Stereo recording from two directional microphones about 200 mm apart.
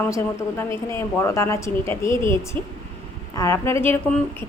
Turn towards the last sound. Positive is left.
turn(degrees=10)  # may be behind; listen again after turning